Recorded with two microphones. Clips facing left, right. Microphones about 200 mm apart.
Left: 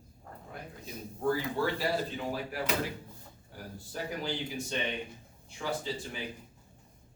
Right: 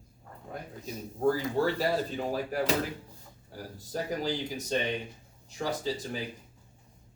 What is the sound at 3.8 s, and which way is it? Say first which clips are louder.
Speech: right 5 dB; 40° right (ahead or behind).